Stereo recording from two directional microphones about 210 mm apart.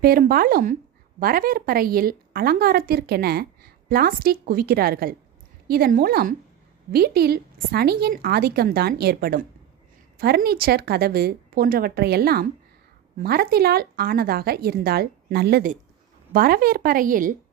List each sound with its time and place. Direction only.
0.0 s a woman's voice: 45° right (ahead or behind)